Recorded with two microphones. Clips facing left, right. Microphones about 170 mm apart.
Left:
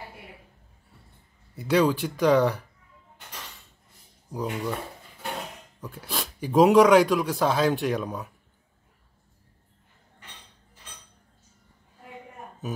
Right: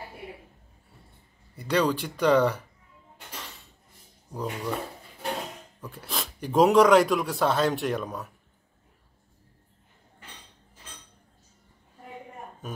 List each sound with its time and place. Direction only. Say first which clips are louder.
1.5 s speech: left 3 dB; 5° left (ahead or behind)
4.3 s speech: left 2 dB; centre (ahead or behind)
5.8 s speech: left 2 dB; centre (ahead or behind)